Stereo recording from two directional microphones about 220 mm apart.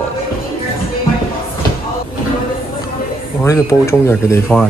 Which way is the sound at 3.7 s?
15° left (ahead or behind).